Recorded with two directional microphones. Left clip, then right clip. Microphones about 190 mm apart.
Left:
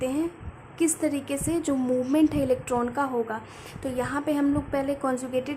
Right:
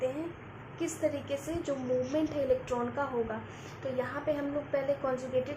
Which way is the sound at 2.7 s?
30° left (ahead or behind).